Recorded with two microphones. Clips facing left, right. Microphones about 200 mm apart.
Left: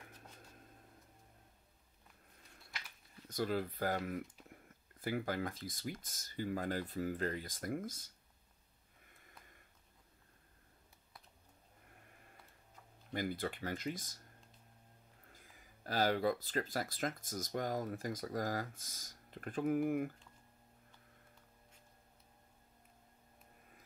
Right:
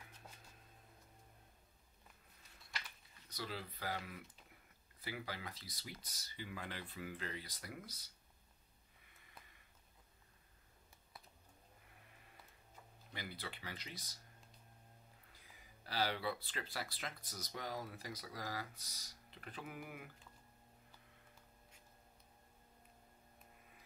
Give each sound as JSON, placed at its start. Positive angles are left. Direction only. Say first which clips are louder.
{"t": 3.3, "sound": "speech", "louder": "left 10 dB", "side_deg": 50}
{"t": 9.0, "sound": "a sound", "louder": "left 1 dB", "side_deg": 45}
{"t": 13.1, "sound": "speech", "louder": "left 11 dB", "side_deg": 45}
{"t": 15.2, "sound": "speech", "louder": "left 3 dB", "side_deg": 45}